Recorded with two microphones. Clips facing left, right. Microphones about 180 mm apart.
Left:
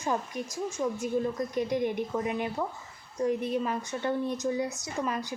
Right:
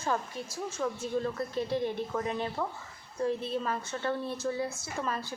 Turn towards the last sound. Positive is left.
turn(degrees=15)  # may be behind; listen again after turning